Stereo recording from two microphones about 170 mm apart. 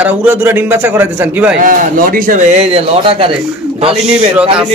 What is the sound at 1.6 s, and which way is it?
Speech, 55° right (ahead or behind).